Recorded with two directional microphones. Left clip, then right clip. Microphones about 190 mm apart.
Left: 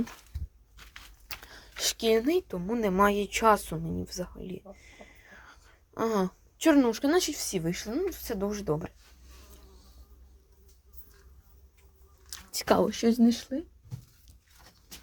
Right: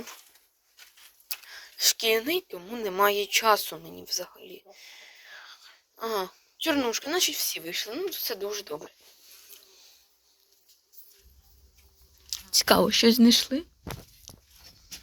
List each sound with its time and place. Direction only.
1.3 s speech: 25° left (ahead or behind)
12.3 s whispering: 10° left (ahead or behind)
12.8 s speech: 15° right (ahead or behind)
14.3 s a sound: 10° left (ahead or behind)